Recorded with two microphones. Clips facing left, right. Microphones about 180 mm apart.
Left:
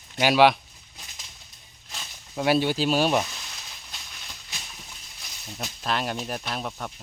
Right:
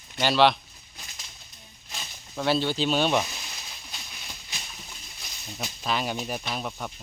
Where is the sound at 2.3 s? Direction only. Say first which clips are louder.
Left 2 dB; 10° left (ahead or behind).